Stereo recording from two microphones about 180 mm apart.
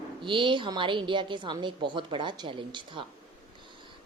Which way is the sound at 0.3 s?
25° right (ahead or behind).